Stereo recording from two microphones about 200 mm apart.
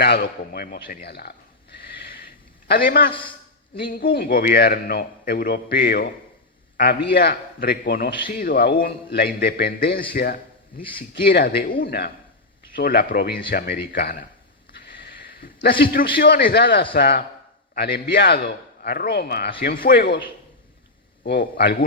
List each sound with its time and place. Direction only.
0.0 s a man's voice: 50° left (ahead or behind)
2.6 s a man's voice: 50° left (ahead or behind)
3.1 s a man's voice: 25° left (ahead or behind)
3.8 s a man's voice: 45° left (ahead or behind)
14.8 s a sound: 50° left (ahead or behind)
16.1 s a man's voice: 50° left (ahead or behind)
21.2 s speech: 55° left (ahead or behind)